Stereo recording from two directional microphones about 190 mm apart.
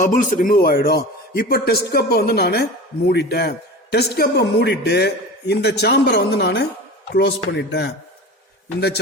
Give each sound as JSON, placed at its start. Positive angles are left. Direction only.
{"t": 0.0, "sound": "a man's voice", "side_deg": 45}